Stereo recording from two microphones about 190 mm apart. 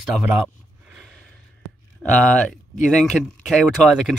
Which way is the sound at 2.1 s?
5° left (ahead or behind).